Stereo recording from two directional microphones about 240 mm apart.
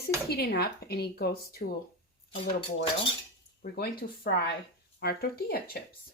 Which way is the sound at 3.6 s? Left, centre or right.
Left.